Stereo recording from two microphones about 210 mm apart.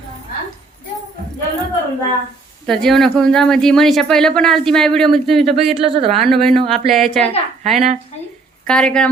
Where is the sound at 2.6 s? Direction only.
Centre (ahead or behind).